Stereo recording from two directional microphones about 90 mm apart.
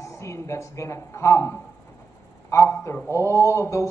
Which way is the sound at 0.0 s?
35° left (ahead or behind).